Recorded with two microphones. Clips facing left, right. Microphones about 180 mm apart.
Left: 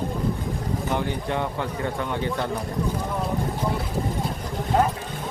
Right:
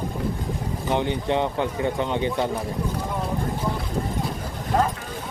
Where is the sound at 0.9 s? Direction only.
20° right (ahead or behind).